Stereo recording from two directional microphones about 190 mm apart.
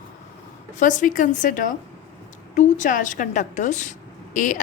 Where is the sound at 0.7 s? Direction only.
40° left (ahead or behind).